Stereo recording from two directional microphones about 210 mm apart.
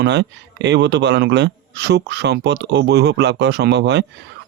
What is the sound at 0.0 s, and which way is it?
Speech, 55° right (ahead or behind).